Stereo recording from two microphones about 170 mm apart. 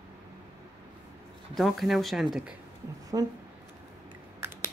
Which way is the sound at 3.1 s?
20° right (ahead or behind).